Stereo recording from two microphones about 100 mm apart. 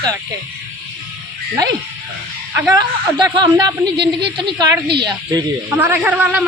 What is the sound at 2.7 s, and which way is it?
Speech, 45° right (ahead or behind).